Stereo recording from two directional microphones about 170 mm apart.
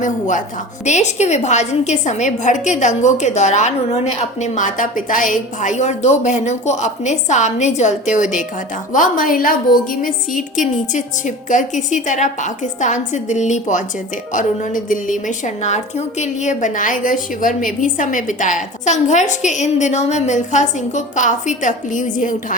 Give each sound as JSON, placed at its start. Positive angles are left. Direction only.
{"t": 0.0, "sound": "a woman's voice", "side_deg": 50}